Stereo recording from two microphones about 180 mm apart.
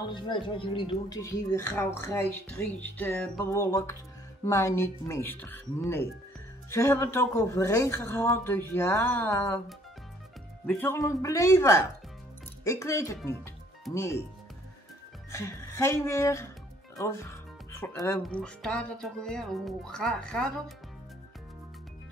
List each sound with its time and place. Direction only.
0.0 s speech: 25° left (ahead or behind)
10.7 s speech: 10° left (ahead or behind)
15.3 s speech: 15° left (ahead or behind)
17.0 s music: 15° left (ahead or behind)
18.2 s speech: 5° left (ahead or behind)